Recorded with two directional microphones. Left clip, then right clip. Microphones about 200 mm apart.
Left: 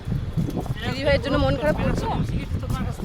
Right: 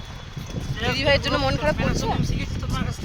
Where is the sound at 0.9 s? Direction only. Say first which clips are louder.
Right 1 dB; 15° left (ahead or behind).